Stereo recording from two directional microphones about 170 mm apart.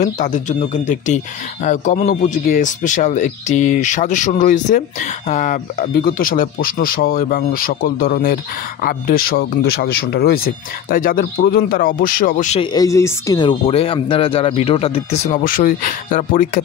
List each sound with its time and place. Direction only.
0.0 s speech: 45° left (ahead or behind)
12.7 s speech: 20° left (ahead or behind); by 16.6 s 50° left (ahead or behind)